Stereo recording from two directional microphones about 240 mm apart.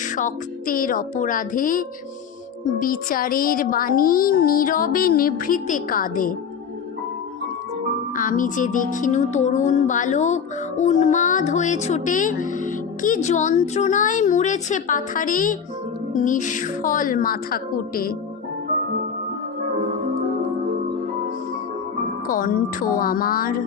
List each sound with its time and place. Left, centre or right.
0.2 s speech: left
8.1 s speech: left
22.3 s speech: left